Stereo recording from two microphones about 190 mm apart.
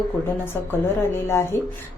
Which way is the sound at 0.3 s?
10° left (ahead or behind).